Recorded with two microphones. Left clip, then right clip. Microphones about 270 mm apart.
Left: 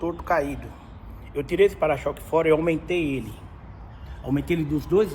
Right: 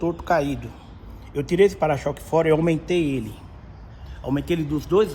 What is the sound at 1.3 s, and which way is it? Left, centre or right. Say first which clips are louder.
A man's voice: right 2 dB; right.